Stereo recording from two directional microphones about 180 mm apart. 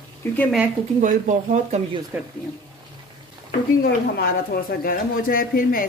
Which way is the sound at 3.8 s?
55° left (ahead or behind).